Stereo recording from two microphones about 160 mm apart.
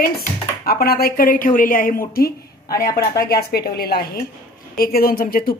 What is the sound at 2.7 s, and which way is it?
Speech, 20° left (ahead or behind).